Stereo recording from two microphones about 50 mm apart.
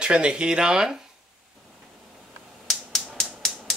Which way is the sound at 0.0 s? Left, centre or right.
Centre.